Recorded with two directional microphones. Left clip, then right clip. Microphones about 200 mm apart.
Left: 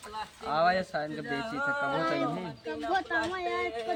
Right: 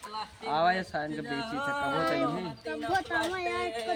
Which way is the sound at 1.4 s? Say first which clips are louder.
Left 1 dB; 60° right (ahead or behind).